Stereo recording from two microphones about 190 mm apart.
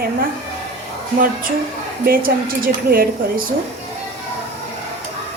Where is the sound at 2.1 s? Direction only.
50° right (ahead or behind).